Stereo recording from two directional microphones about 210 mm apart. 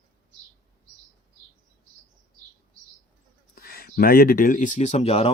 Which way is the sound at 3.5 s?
45° left (ahead or behind).